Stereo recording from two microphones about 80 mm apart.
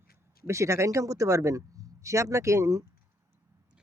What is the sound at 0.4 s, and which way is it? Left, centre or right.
A man's voice, right.